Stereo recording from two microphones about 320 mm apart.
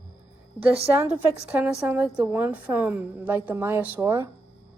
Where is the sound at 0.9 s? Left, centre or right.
Centre.